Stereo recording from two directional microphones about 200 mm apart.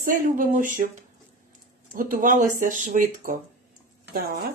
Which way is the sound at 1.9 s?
40° right (ahead or behind).